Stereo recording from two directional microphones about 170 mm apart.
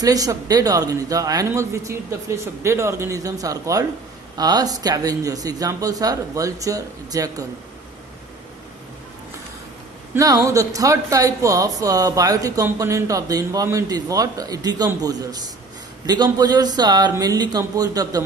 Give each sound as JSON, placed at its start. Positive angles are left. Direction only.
{"t": 0.0, "sound": "speech", "side_deg": -20}
{"t": 10.2, "sound": "speech", "side_deg": -20}